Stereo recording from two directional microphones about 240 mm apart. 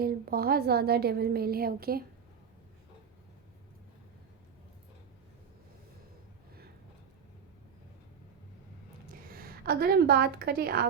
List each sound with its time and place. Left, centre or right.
0.0 s a woman's voice: right
9.3 s a woman's voice: right